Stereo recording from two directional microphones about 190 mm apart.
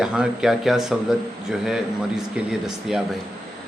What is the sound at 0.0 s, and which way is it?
Speech, 5° right (ahead or behind).